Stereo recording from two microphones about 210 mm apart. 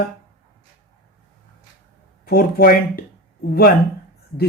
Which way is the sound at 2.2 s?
45° left (ahead or behind).